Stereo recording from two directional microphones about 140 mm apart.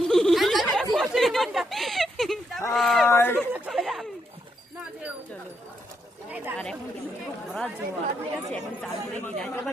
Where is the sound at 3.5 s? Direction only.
5° right (ahead or behind).